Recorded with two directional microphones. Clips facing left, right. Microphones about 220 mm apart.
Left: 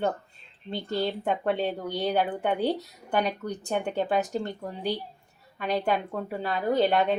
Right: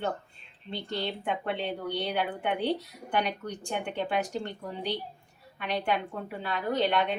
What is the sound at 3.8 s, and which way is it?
Speech, 40° left (ahead or behind).